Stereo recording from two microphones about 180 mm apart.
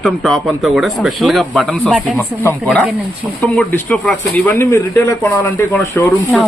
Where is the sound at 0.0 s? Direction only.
Centre (ahead or behind).